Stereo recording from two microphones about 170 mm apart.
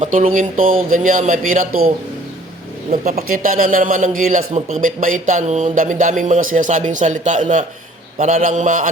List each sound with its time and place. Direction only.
0.0 s a man's voice: 50° right (ahead or behind)
2.9 s a man's voice: 45° right (ahead or behind)